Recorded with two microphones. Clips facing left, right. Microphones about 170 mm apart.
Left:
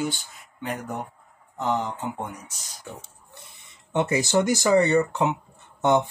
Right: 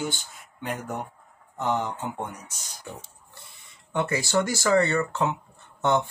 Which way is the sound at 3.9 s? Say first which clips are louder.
Left 3 dB; 20° left (ahead or behind).